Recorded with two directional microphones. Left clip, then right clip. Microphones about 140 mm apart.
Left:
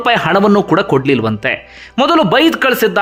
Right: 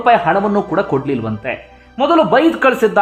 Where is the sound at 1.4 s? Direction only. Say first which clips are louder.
Left 6 dB; 40° left (ahead or behind).